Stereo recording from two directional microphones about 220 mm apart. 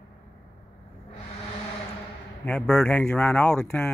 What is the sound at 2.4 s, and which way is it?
Speech, 5° left (ahead or behind).